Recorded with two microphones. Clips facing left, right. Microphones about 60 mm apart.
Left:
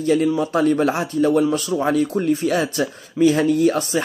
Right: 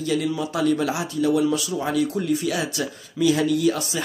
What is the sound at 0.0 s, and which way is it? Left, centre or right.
Speech, left.